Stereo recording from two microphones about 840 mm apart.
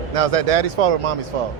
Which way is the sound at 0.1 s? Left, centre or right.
Right.